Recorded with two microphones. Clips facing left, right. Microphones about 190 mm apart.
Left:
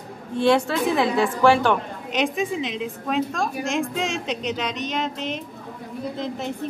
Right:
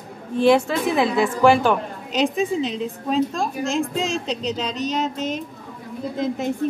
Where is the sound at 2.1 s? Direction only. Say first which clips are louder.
Right 3 dB; 35° right (ahead or behind).